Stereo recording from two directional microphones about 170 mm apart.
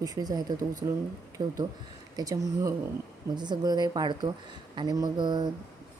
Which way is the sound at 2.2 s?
20° right (ahead or behind).